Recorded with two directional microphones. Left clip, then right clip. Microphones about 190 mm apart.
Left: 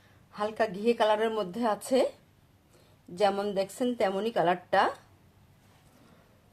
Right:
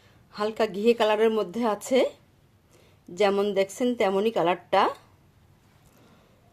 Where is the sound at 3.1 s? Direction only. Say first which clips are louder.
Right 4 dB; 30° right (ahead or behind).